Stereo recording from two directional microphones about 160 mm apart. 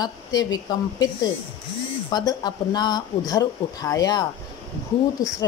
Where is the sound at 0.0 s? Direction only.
25° left (ahead or behind).